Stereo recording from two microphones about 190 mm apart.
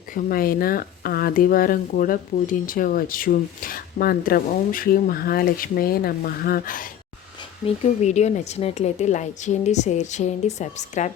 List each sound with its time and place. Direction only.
0.1 s speech: 50° left (ahead or behind)
8.0 s a woman's voice: 35° left (ahead or behind)